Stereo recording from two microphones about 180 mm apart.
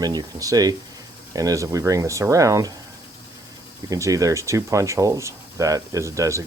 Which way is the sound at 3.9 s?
20° right (ahead or behind).